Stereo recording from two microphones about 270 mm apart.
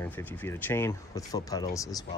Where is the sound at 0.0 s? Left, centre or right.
Centre.